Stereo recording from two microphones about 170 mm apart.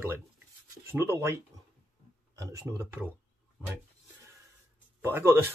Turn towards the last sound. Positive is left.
turn(degrees=-15)  # may be behind; listen again after turning